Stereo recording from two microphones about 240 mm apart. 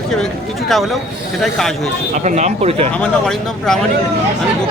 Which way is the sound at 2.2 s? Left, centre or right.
Right.